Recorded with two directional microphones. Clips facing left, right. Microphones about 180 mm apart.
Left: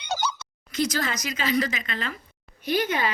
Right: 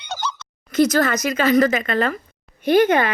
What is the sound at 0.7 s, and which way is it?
A woman's voice, 50° right (ahead or behind).